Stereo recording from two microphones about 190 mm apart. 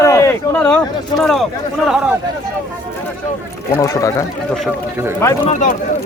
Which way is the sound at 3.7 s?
15° left (ahead or behind).